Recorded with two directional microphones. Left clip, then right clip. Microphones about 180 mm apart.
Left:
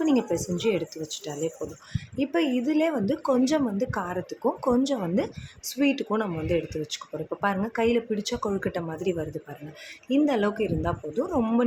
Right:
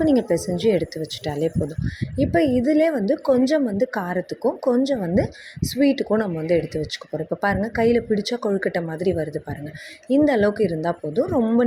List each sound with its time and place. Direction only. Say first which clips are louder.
0.0 s speech: right 6 dB; 20° right (ahead or behind)